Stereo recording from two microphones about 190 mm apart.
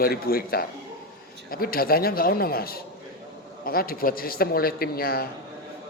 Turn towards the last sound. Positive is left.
turn(degrees=50)  # may be behind; listen again after turning